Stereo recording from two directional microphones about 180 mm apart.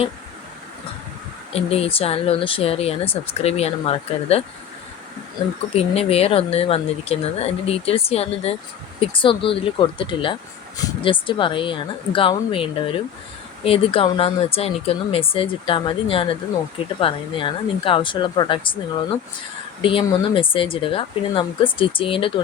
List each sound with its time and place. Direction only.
1.5 s speech: 35° left (ahead or behind)
5.7 s speech: 35° left (ahead or behind)
19.8 s speech: 30° left (ahead or behind)